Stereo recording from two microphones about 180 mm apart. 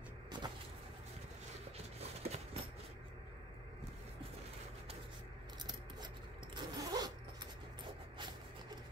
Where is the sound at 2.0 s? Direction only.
35° right (ahead or behind).